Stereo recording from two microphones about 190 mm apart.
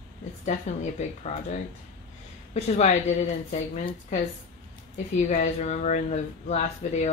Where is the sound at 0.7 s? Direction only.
35° left (ahead or behind).